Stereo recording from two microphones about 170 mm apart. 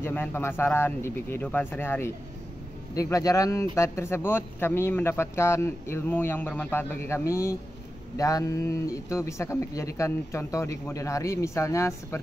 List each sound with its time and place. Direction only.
0.0 s speech: 10° left (ahead or behind)